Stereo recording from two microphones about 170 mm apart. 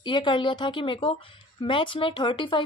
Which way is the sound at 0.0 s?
30° left (ahead or behind).